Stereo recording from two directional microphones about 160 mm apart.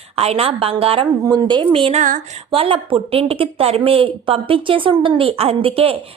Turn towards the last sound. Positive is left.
turn(degrees=-35)  # may be behind; listen again after turning